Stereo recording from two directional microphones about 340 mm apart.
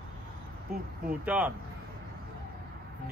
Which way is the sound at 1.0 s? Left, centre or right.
Centre.